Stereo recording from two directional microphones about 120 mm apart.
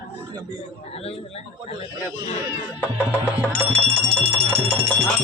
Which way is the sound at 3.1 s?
20° right (ahead or behind).